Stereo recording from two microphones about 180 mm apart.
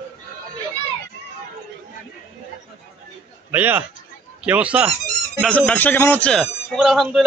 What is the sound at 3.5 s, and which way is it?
Speech, 10° right (ahead or behind).